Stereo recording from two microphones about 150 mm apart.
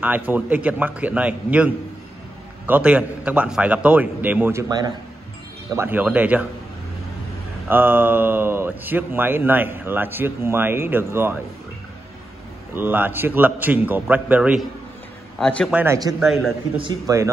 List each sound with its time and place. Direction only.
0.0 s speech: 10° right (ahead or behind); by 4.9 s 25° right (ahead or behind)
5.8 s speech: 15° right (ahead or behind)
7.6 s speech: 10° right (ahead or behind)
12.7 s a man's voice: 15° right (ahead or behind); by 15.7 s 5° left (ahead or behind)
15.7 s a man's voice: 15° right (ahead or behind)